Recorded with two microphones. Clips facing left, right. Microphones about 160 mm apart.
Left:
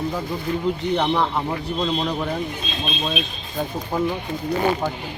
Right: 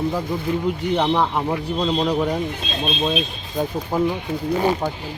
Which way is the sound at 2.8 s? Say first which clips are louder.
Right 5 dB; 35° right (ahead or behind).